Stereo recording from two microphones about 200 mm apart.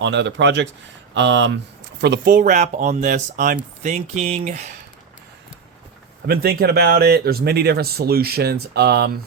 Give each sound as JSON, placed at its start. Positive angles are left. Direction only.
{"t": 0.0, "sound": "speech", "side_deg": -60}
{"t": 6.2, "sound": "speech", "side_deg": -50}